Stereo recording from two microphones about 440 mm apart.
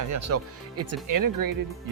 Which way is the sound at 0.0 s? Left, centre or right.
Right.